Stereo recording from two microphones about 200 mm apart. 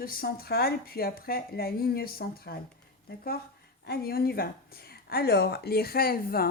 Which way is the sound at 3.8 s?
50° left (ahead or behind).